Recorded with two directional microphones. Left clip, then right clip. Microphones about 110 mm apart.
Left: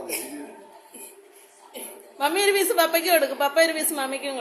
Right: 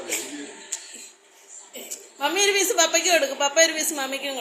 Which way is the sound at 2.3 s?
15° left (ahead or behind).